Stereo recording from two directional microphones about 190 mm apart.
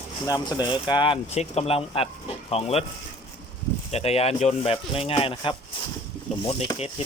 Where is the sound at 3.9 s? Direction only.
35° left (ahead or behind).